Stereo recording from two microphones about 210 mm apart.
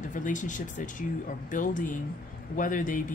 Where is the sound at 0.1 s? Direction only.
35° left (ahead or behind).